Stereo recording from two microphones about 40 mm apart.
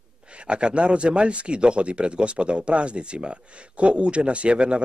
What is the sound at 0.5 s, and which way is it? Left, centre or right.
Speech, right.